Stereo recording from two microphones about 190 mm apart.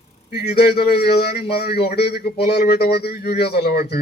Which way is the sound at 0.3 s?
55° left (ahead or behind).